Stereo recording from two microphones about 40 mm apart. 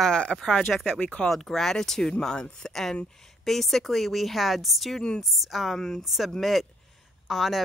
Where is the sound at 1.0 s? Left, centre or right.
Left.